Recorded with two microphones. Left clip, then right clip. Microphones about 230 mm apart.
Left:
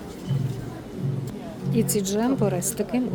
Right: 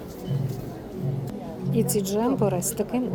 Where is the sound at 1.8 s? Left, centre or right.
Centre.